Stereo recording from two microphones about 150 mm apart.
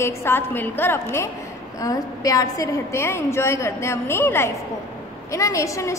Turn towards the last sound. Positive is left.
turn(degrees=20)  # may be behind; listen again after turning